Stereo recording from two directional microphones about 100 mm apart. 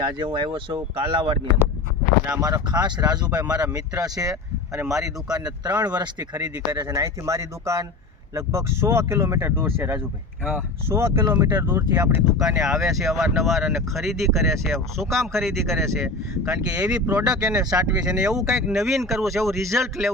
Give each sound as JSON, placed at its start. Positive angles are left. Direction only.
{"t": 0.2, "sound": "speech", "side_deg": -55}
{"t": 2.3, "sound": "speech", "side_deg": -40}
{"t": 6.8, "sound": "speech", "side_deg": -30}
{"t": 12.4, "sound": "speech", "side_deg": -5}
{"t": 17.6, "sound": "speech", "side_deg": -35}
{"t": 17.8, "sound": "speech", "side_deg": -10}